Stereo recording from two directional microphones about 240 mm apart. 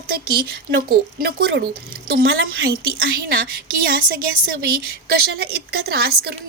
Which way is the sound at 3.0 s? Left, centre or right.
Right.